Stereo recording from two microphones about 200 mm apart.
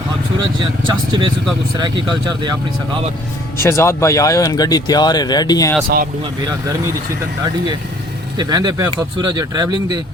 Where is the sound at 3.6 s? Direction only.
15° left (ahead or behind).